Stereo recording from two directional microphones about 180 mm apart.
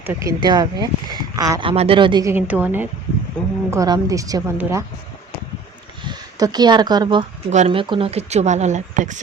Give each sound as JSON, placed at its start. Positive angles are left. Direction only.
{"t": 0.0, "sound": "a woman's voice", "side_deg": -10}
{"t": 0.3, "sound": "speech", "side_deg": -25}
{"t": 1.7, "sound": "speech", "side_deg": -35}
{"t": 2.3, "sound": "a woman's voice", "side_deg": -10}
{"t": 3.4, "sound": "speech", "side_deg": 5}
{"t": 3.7, "sound": "speech", "side_deg": -20}
{"t": 6.1, "sound": "speech", "side_deg": -20}
{"t": 7.5, "sound": "speech", "side_deg": -35}